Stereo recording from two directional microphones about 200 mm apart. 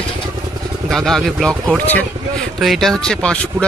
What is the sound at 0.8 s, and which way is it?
Speech, centre (ahead or behind).